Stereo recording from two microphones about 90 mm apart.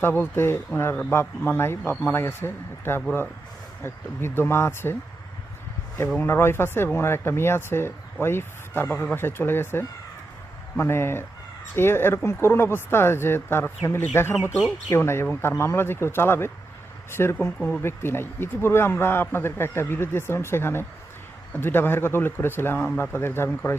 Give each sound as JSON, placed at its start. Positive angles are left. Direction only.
{"t": 0.0, "sound": "speech", "side_deg": 25}
{"t": 6.1, "sound": "speech", "side_deg": 25}